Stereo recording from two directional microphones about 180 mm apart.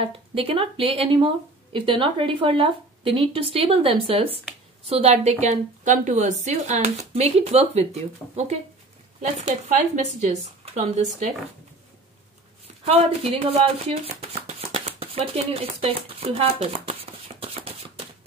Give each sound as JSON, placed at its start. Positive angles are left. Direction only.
{"t": 0.0, "sound": "speech", "side_deg": -30}
{"t": 12.8, "sound": "speech", "side_deg": -35}
{"t": 14.7, "sound": "a sound", "side_deg": -30}